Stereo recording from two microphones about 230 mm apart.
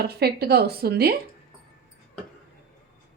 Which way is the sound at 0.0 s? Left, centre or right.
Right.